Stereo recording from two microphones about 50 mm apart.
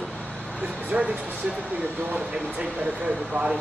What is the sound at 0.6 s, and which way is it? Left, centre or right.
Speech, right.